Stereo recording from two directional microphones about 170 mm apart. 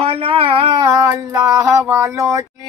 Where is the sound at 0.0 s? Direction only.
35° right (ahead or behind).